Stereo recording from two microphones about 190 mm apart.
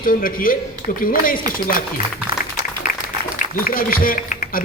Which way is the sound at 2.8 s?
45° left (ahead or behind).